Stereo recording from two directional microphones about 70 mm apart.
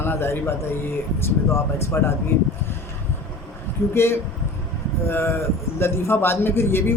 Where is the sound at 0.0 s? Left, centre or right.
Left.